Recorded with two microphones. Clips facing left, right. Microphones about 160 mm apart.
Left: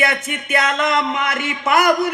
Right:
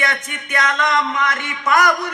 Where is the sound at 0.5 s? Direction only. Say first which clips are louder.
Left 1 dB; 25° left (ahead or behind).